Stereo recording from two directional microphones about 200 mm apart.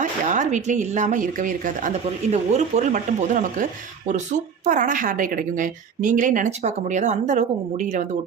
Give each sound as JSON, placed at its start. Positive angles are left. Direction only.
{"t": 0.0, "sound": "speech", "side_deg": -40}